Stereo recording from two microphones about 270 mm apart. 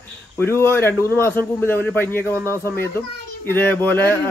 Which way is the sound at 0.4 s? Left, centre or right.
Centre.